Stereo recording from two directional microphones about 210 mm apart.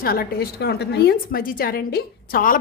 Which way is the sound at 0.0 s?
45° left (ahead or behind).